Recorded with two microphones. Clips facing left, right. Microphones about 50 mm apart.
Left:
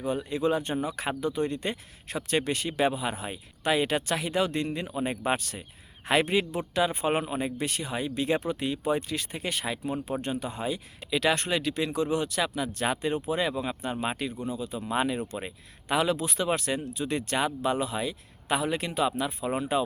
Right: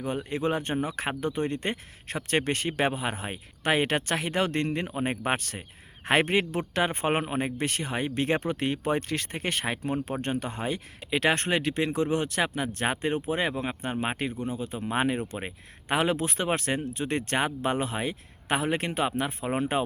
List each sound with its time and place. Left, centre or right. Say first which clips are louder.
0.0 s speech: left 1 dB; right